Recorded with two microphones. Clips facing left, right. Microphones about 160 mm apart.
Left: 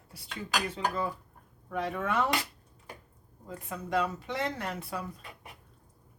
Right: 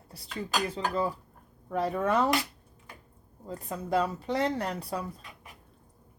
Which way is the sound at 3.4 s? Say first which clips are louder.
Right 3 dB; 35° right (ahead or behind).